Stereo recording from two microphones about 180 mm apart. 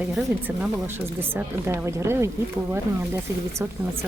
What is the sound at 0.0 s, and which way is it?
Speech, 5° right (ahead or behind).